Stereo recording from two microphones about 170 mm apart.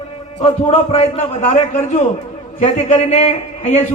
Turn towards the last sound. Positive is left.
turn(degrees=40)  # may be behind; listen again after turning